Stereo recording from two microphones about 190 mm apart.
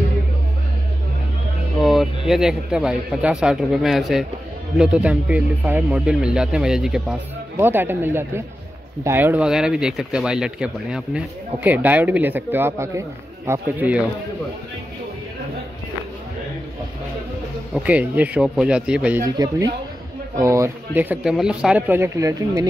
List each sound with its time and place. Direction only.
1.8 s a man's voice: centre (ahead or behind)
17.7 s speech: 5° right (ahead or behind)
19.3 s speech: 20° right (ahead or behind)